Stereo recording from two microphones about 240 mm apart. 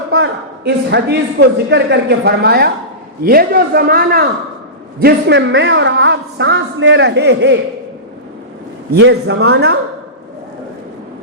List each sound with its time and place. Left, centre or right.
0.1 s a man's voice: right
8.9 s a man's voice: right